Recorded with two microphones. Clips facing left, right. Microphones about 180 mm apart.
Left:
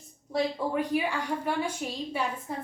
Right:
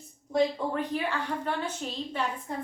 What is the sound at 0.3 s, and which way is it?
A woman's voice, 10° left (ahead or behind).